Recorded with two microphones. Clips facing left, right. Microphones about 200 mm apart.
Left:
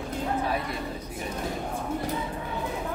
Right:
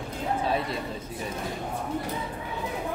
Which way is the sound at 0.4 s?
25° right (ahead or behind).